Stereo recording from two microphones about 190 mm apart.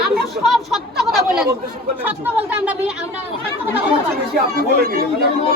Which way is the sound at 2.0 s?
10° right (ahead or behind).